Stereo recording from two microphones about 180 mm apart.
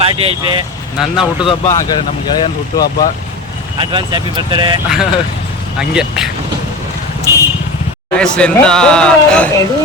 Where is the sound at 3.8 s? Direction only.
25° right (ahead or behind).